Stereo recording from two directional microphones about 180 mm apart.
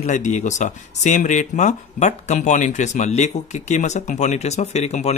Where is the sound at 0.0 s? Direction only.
40° left (ahead or behind).